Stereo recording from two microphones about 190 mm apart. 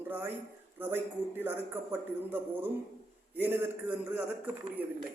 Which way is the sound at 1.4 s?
10° right (ahead or behind).